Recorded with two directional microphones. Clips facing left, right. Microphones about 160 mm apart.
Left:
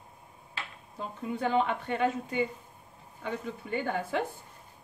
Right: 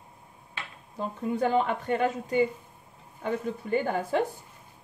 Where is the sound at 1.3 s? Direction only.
45° right (ahead or behind).